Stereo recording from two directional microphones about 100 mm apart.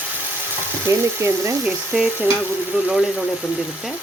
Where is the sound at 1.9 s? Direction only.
10° right (ahead or behind).